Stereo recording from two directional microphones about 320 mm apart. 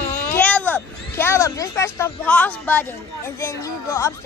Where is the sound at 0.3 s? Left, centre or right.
Centre.